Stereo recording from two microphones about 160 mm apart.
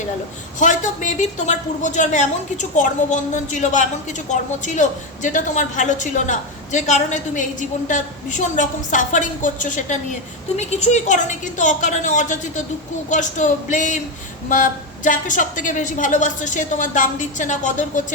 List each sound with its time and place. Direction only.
0.6 s a woman's voice: 50° left (ahead or behind)